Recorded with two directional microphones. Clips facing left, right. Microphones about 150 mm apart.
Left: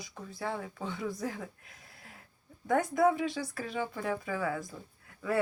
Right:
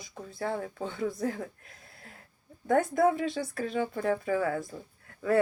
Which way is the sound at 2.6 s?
50° right (ahead or behind).